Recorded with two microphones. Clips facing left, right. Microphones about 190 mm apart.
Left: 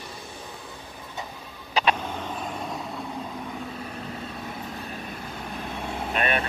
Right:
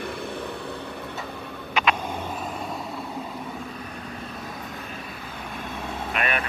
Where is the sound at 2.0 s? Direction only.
10° right (ahead or behind).